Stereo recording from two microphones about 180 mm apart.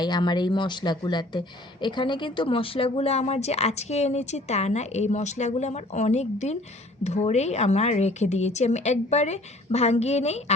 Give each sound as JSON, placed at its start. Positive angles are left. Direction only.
{"t": 0.0, "sound": "speech", "side_deg": 25}